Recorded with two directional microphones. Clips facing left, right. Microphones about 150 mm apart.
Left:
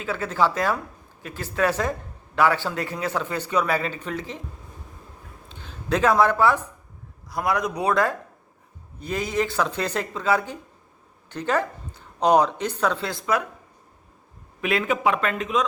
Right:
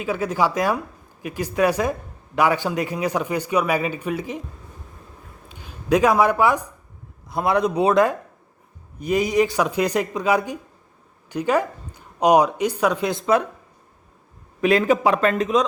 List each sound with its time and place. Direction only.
0.0 s speech: 15° right (ahead or behind)
5.5 s speech: 10° right (ahead or behind)
7.3 s a man's voice: 25° right (ahead or behind)
14.6 s speech: 35° right (ahead or behind)